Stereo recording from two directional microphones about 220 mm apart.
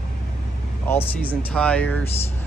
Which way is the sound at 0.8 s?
10° left (ahead or behind).